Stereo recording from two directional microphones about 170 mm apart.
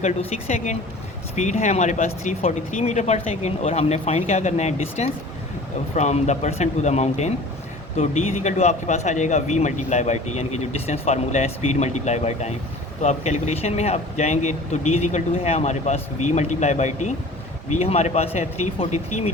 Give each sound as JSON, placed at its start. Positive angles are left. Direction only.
{"t": 0.0, "sound": "speech", "side_deg": 40}